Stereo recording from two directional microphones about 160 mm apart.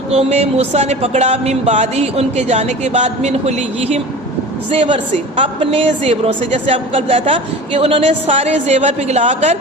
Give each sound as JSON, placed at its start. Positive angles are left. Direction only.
{"t": 0.1, "sound": "a woman's voice", "side_deg": -40}